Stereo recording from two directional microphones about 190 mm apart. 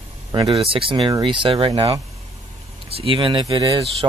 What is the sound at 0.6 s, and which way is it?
Speech, 30° right (ahead or behind).